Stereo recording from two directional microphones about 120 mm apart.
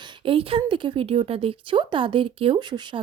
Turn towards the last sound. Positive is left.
turn(degrees=-40)  # may be behind; listen again after turning